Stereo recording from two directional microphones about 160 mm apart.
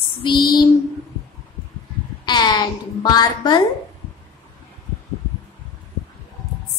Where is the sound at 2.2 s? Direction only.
25° left (ahead or behind).